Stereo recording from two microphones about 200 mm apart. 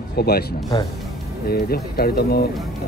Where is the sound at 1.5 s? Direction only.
50° left (ahead or behind).